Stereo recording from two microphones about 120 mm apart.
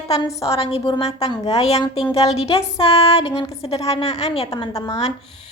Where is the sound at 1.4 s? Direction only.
60° left (ahead or behind).